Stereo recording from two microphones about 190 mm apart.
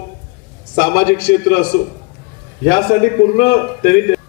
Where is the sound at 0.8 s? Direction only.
70° left (ahead or behind).